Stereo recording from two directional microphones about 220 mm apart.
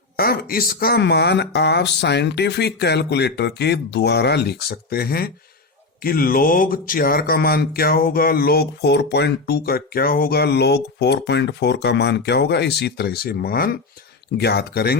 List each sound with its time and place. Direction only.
0.2 s speech: 45° left (ahead or behind)